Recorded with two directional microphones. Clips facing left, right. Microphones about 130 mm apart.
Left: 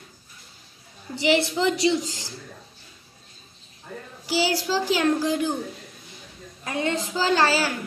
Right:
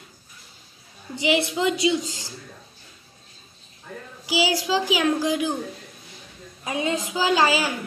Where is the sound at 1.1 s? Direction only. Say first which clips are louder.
Left 1 dB; 20° right (ahead or behind).